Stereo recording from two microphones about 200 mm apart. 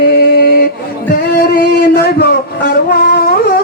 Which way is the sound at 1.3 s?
55° left (ahead or behind).